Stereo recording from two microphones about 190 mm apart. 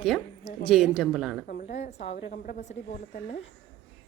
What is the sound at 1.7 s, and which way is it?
Speech, 35° left (ahead or behind).